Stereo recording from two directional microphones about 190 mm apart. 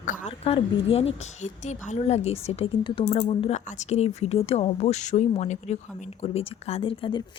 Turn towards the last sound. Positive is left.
turn(degrees=25)  # may be behind; listen again after turning